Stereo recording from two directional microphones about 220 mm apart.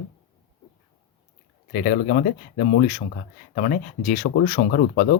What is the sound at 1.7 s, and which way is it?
Speech, 45° left (ahead or behind).